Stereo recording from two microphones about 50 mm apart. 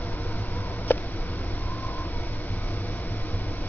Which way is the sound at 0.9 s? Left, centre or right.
Left.